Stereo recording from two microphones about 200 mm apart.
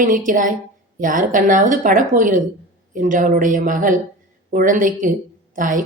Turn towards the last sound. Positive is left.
turn(degrees=-40)  # may be behind; listen again after turning